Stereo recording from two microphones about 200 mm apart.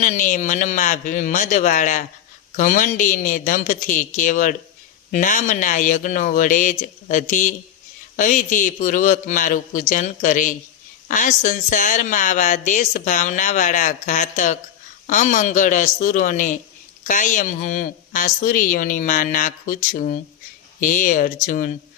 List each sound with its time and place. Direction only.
0.0 s speech: 40° left (ahead or behind)